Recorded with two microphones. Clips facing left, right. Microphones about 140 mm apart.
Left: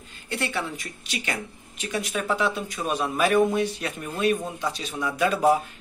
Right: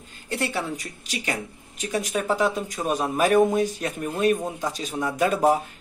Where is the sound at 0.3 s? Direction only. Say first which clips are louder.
Right 2 dB; 40° right (ahead or behind).